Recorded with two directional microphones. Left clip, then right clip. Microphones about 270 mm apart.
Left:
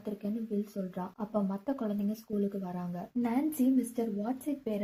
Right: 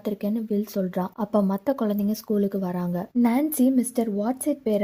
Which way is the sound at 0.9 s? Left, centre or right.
Right.